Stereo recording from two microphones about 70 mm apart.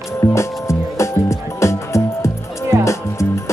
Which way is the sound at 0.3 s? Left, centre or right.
Left.